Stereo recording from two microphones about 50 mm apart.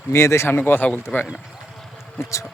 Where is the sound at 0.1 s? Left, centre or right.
Left.